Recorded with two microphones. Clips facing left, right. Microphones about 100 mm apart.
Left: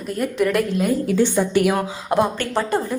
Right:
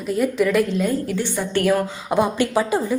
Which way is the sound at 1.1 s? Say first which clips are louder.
Left 5 dB; 15° left (ahead or behind).